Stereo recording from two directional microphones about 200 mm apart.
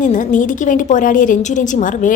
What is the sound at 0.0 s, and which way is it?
A woman's voice, 40° left (ahead or behind).